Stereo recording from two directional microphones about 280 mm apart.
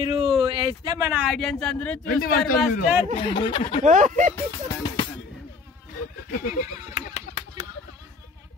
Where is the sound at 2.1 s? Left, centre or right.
Left.